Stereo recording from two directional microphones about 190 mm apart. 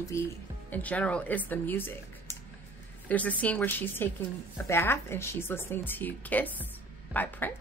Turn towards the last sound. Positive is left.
turn(degrees=10)  # may be behind; listen again after turning